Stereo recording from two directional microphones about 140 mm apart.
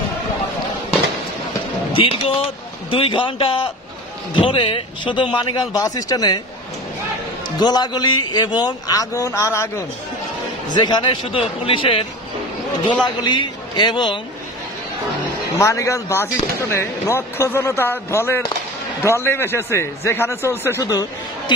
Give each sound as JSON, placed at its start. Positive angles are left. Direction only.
{"t": 1.9, "sound": "speech", "side_deg": 40}
{"t": 7.6, "sound": "speech", "side_deg": 30}
{"t": 10.7, "sound": "speech", "side_deg": 30}
{"t": 15.6, "sound": "speech", "side_deg": 20}